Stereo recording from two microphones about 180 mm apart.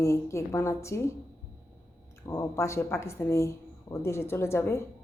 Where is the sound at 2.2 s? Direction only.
15° left (ahead or behind).